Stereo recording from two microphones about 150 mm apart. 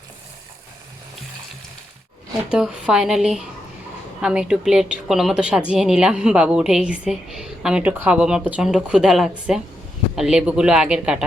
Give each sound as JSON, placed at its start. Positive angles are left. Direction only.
{"t": 2.5, "sound": "a woman's voice", "side_deg": -5}